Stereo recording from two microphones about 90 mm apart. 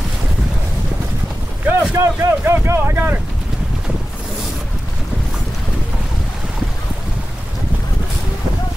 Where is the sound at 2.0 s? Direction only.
30° right (ahead or behind).